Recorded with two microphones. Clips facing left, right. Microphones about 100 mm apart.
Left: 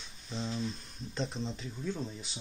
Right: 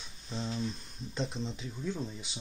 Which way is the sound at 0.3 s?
5° right (ahead or behind).